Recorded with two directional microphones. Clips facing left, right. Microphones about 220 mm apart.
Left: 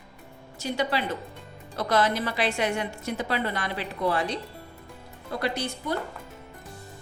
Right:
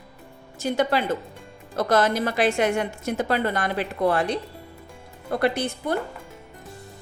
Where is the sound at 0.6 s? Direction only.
50° right (ahead or behind).